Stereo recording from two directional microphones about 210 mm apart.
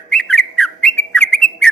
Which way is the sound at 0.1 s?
5° left (ahead or behind).